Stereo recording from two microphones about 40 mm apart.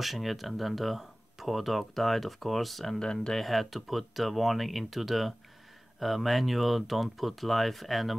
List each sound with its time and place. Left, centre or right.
0.0 s speech: centre
3.0 s speech: centre
3.3 s speech: centre